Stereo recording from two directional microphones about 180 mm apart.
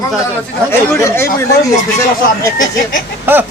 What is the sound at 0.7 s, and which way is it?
Speech, 15° left (ahead or behind).